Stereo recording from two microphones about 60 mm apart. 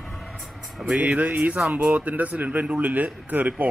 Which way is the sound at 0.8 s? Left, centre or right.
Centre.